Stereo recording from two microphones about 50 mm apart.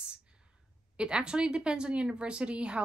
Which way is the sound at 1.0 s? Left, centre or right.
Centre.